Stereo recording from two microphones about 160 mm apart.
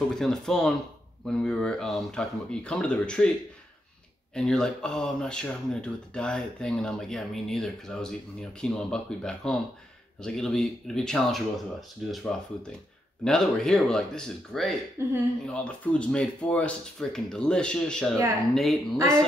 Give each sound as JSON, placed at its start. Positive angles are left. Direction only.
{"t": 0.1, "sound": "speech", "side_deg": 0}
{"t": 4.3, "sound": "speech", "side_deg": 5}
{"t": 13.2, "sound": "speech", "side_deg": 5}
{"t": 15.0, "sound": "speech", "side_deg": -15}
{"t": 15.4, "sound": "speech", "side_deg": 5}
{"t": 18.9, "sound": "speech", "side_deg": -20}